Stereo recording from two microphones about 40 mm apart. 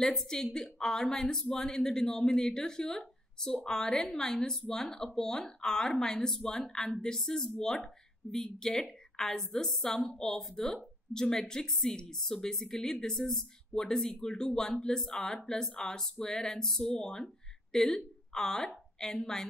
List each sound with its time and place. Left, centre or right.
0.0 s a woman's voice: centre